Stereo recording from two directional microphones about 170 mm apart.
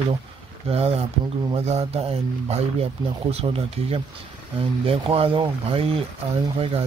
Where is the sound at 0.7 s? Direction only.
35° right (ahead or behind).